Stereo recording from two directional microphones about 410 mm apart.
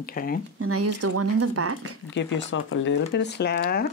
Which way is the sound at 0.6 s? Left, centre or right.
Right.